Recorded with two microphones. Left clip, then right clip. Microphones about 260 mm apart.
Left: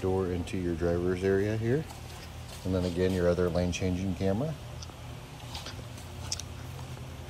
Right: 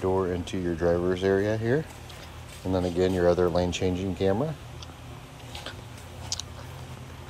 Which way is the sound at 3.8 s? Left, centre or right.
Right.